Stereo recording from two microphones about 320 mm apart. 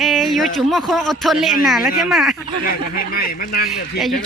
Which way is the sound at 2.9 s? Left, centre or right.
Left.